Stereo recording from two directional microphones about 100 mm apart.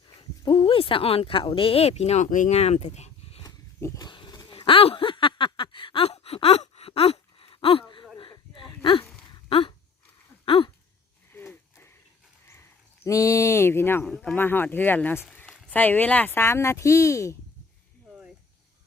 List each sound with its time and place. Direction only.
0.2 s speech: 65° left (ahead or behind); by 3.4 s 90° left
3.9 s a sound: 45° left (ahead or behind)
11.3 s wheeze: 20° left (ahead or behind)
12.5 s a sound: 25° left (ahead or behind)
14.0 s speech: 5° left (ahead or behind)
14.3 s speech: 20° left (ahead or behind)